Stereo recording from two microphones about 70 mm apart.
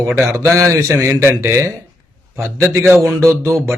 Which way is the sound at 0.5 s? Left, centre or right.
Right.